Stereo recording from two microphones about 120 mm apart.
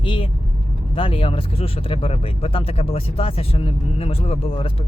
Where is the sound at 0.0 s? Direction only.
45° left (ahead or behind).